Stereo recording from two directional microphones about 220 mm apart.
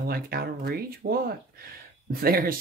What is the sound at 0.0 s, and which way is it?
Speech, 45° right (ahead or behind).